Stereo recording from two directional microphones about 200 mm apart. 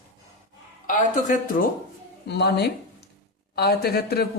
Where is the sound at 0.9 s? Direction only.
40° left (ahead or behind).